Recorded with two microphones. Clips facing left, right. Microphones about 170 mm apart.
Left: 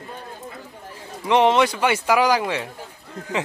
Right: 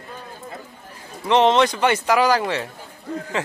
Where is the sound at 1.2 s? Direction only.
10° left (ahead or behind).